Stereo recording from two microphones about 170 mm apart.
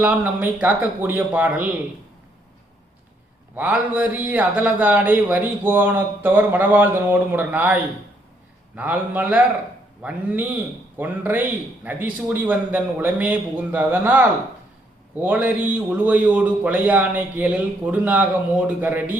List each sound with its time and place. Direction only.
0.0 s a man's voice: 10° right (ahead or behind)
3.5 s a man's voice: 10° right (ahead or behind)